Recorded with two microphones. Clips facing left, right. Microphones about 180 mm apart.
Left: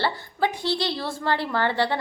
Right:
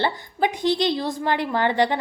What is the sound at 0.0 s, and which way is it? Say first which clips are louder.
A woman's voice: right 2 dB; 20° right (ahead or behind).